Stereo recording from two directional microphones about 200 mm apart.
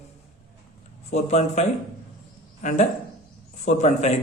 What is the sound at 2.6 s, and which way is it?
Speech, 40° left (ahead or behind).